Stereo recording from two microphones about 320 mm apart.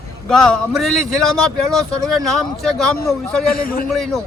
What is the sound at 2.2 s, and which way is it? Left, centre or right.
A man's voice, centre.